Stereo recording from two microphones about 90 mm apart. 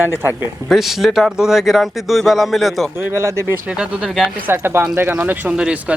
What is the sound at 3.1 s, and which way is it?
Speech, 30° right (ahead or behind).